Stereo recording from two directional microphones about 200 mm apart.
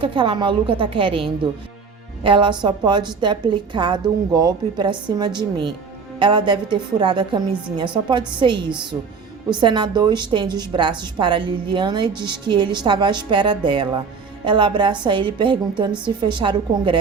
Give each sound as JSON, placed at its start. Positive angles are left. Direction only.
{"t": 0.0, "sound": "a woman's voice", "side_deg": -25}